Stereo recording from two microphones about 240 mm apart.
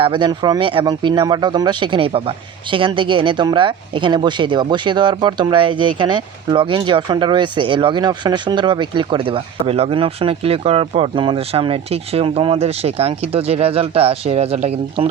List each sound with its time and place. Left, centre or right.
0.0 s speech: centre